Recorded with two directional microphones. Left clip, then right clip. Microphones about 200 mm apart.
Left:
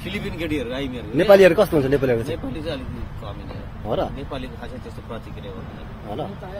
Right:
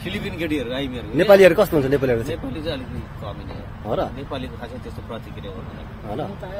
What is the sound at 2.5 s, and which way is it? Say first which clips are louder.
Speech: right 1 dB; 5° left (ahead or behind).